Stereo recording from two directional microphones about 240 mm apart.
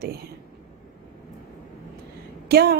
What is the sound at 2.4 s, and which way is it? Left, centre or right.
Speech, right.